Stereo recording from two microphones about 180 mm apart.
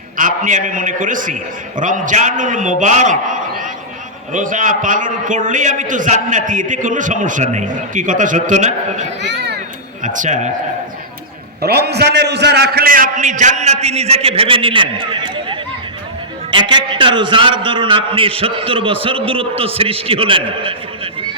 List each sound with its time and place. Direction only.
0.2 s a man's voice: 45° right (ahead or behind)
9.2 s speech: 70° right (ahead or behind)
10.0 s a man's voice: 45° right (ahead or behind)
11.6 s a man's voice: 65° right (ahead or behind); by 21.1 s 30° right (ahead or behind)